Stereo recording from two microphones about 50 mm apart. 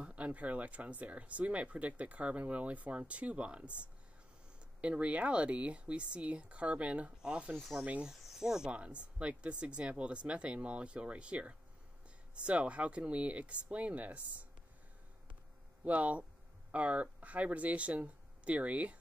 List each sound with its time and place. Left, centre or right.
0.0 s speech: right
4.8 s speech: right
8.1 s speech: centre
8.7 s speech: right
15.8 s speech: right